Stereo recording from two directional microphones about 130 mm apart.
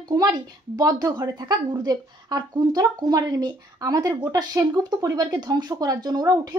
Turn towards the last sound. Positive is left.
turn(degrees=-30)  # may be behind; listen again after turning